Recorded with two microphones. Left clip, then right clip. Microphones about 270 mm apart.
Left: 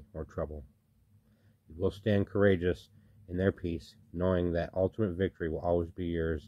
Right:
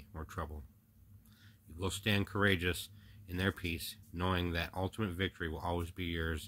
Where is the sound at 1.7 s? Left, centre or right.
Centre.